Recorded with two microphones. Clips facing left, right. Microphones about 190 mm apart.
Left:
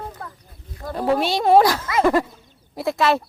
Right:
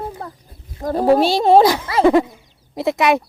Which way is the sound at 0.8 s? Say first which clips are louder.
Right 6 dB; 40° right (ahead or behind).